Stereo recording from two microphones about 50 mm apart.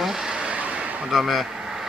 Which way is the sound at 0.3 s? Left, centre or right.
Right.